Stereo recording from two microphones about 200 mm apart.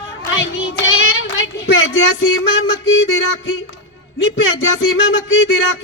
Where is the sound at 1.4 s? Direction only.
75° left (ahead or behind).